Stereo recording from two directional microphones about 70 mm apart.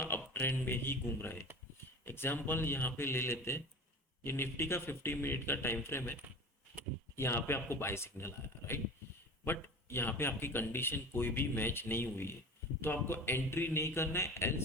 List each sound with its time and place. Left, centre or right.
0.0 s speech: left
7.2 s speech: left